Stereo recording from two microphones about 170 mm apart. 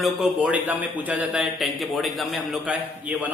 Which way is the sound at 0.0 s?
10° right (ahead or behind).